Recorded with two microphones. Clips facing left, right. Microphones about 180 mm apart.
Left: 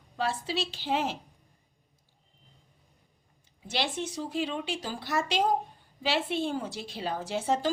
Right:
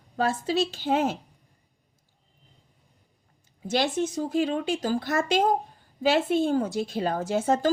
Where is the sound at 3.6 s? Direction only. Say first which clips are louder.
Right 7 dB; 45° right (ahead or behind).